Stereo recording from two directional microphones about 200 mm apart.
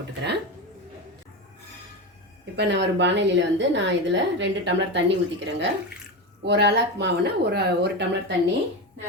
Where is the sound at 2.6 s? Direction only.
60° right (ahead or behind).